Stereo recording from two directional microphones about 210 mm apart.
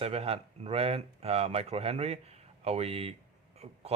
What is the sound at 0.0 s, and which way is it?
Speech, 30° right (ahead or behind).